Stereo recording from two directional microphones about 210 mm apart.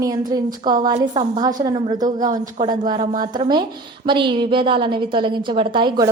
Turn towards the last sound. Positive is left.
turn(degrees=-20)  # may be behind; listen again after turning